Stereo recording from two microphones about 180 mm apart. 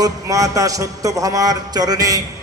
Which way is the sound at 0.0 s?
20° right (ahead or behind).